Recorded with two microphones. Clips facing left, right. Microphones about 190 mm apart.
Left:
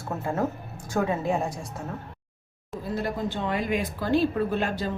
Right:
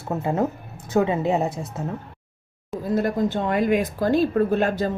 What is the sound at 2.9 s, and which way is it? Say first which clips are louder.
Speech: right 7 dB; 45° right (ahead or behind).